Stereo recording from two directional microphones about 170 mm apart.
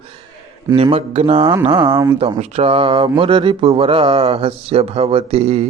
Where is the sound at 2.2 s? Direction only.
40° right (ahead or behind).